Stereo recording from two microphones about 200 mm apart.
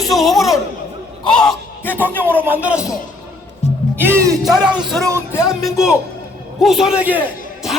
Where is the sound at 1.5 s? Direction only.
10° left (ahead or behind).